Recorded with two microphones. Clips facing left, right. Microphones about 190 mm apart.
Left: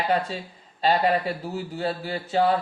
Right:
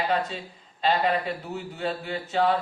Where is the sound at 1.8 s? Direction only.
35° left (ahead or behind).